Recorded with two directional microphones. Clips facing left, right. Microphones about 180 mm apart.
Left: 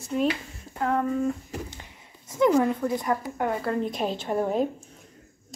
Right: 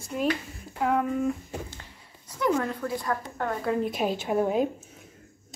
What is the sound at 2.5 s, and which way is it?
A woman's voice, 15° left (ahead or behind).